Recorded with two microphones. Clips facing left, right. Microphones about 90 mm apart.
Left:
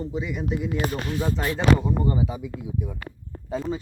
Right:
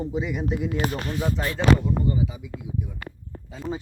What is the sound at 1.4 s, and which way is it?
Speech, 20° left (ahead or behind).